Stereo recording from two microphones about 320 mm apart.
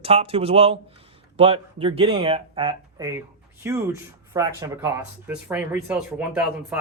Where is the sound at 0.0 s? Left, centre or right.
Centre.